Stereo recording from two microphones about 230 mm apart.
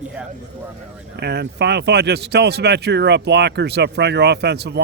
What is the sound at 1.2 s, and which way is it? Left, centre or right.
A man's voice, right.